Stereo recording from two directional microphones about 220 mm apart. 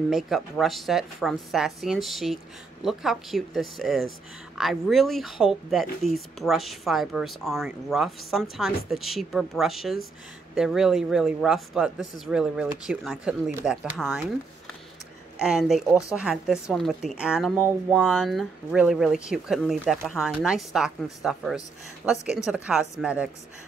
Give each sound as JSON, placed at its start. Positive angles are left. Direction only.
{"t": 0.1, "sound": "speech", "side_deg": 0}